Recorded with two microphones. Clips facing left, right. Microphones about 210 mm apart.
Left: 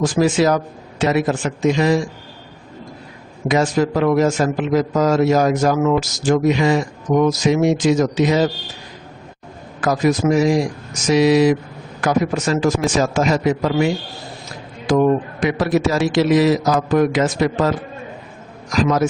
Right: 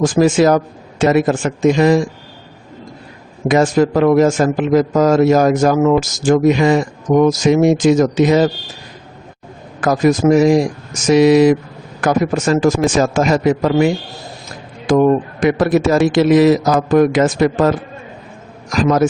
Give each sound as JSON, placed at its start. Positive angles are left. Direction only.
{"t": 0.0, "sound": "a man's voice", "side_deg": -50}
{"t": 3.5, "sound": "a man's voice", "side_deg": -50}
{"t": 9.8, "sound": "a man's voice", "side_deg": -50}